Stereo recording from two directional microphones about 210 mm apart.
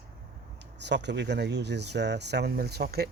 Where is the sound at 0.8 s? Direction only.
55° right (ahead or behind).